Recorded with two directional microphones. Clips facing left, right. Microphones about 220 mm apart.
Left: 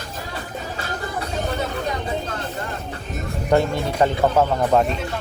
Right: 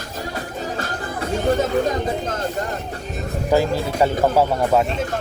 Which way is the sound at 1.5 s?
45° right (ahead or behind).